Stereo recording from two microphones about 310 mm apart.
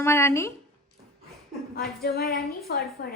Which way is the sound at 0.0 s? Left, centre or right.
Centre.